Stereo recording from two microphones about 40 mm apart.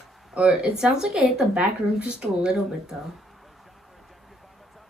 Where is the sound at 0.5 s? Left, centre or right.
Centre.